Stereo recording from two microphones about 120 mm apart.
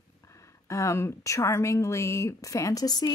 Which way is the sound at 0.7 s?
25° left (ahead or behind).